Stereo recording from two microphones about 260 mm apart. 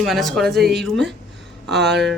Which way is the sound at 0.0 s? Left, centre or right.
Centre.